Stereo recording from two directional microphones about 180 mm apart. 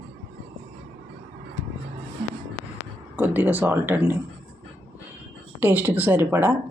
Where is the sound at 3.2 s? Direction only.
10° right (ahead or behind).